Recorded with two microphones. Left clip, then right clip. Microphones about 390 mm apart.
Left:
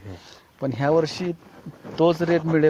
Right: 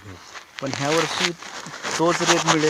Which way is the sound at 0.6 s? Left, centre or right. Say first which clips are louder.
Left 2 dB; centre.